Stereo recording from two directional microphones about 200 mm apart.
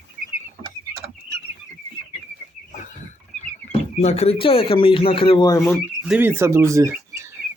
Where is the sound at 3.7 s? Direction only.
30° left (ahead or behind).